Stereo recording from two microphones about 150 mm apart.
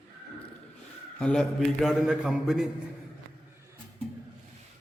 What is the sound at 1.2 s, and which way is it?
A man's voice, 5° left (ahead or behind).